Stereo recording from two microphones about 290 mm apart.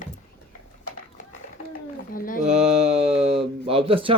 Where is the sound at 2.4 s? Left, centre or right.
Right.